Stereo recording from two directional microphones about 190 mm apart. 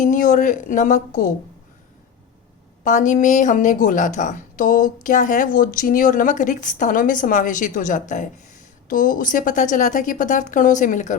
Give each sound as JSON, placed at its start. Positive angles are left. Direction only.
{"t": 0.0, "sound": "a woman's voice", "side_deg": 45}
{"t": 2.8, "sound": "a woman's voice", "side_deg": 40}